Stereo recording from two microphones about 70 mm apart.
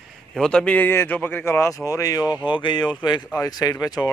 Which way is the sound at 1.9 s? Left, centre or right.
Left.